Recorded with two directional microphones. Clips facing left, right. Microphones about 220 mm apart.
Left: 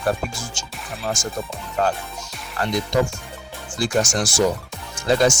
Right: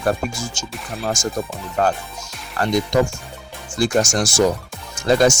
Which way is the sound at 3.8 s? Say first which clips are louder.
Right 3 dB; 45° right (ahead or behind).